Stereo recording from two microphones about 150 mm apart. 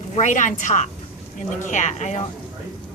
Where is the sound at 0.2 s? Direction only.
55° left (ahead or behind).